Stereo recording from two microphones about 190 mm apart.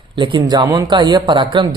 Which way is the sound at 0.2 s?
25° right (ahead or behind).